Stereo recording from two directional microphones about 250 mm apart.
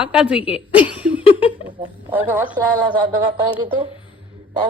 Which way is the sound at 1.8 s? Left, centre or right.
Centre.